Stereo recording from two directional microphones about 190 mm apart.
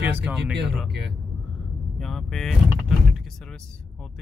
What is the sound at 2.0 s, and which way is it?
Door, centre (ahead or behind).